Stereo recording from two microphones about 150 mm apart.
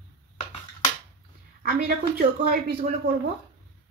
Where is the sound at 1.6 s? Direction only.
75° right (ahead or behind).